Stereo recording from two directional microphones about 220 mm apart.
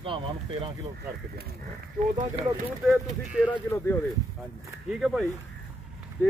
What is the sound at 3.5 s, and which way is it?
Speech, 10° left (ahead or behind).